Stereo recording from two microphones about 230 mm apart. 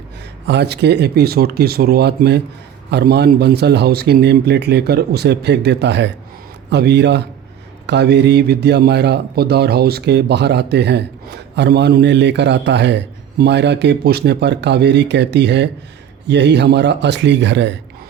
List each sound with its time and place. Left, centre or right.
0.4 s speech: right